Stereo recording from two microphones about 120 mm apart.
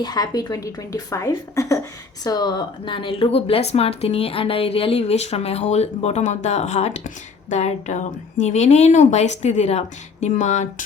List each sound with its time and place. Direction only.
0.0 s a woman's voice: 35° left (ahead or behind); by 10.8 s 85° left